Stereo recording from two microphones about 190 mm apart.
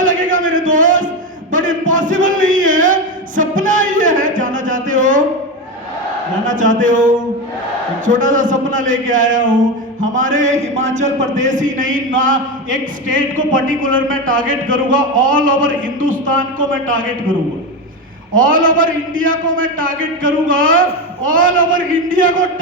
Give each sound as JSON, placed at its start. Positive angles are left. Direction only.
{"t": 0.0, "sound": "a sound", "side_deg": -45}
{"t": 6.4, "sound": "a man's voice", "side_deg": -45}
{"t": 18.3, "sound": "a man's voice", "side_deg": -45}